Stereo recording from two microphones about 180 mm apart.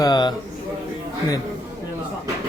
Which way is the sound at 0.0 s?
25° left (ahead or behind).